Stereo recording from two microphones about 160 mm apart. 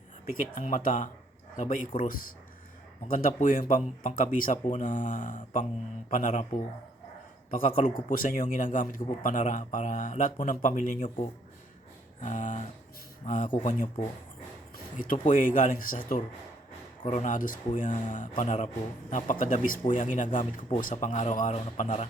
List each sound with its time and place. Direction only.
0.3 s speech: 55° left (ahead or behind)
8.1 s speech: 60° left (ahead or behind)
12.2 s speech: 50° left (ahead or behind)
13.8 s speech: 30° left (ahead or behind)
14.9 s speech: 55° left (ahead or behind)
17.0 s speech: 45° left (ahead or behind)